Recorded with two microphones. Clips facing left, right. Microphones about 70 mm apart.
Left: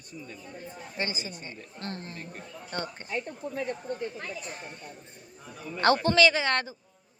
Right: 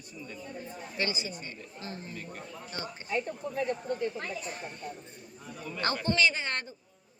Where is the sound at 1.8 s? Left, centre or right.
Left.